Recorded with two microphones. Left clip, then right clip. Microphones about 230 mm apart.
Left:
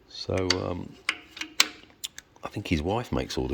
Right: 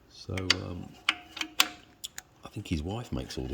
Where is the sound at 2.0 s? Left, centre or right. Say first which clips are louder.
Left 6 dB; centre.